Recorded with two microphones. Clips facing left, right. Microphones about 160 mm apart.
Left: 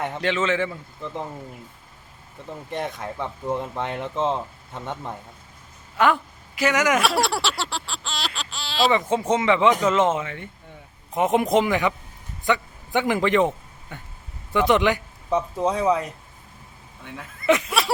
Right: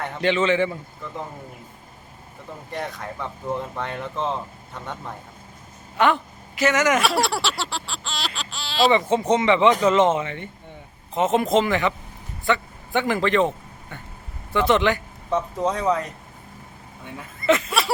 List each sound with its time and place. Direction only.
0.2 s speech: centre (ahead or behind)
2.7 s speech: 20° left (ahead or behind)
6.0 s speech: 5° left (ahead or behind)
11.1 s a man's voice: 15° left (ahead or behind)
17.4 s speech: 10° left (ahead or behind)